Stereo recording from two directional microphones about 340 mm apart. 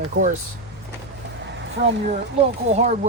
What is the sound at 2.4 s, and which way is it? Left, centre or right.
Speech, centre.